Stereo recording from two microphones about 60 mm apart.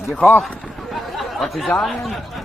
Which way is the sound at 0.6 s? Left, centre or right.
Centre.